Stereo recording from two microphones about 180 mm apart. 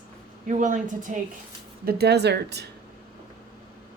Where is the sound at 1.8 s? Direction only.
60° right (ahead or behind).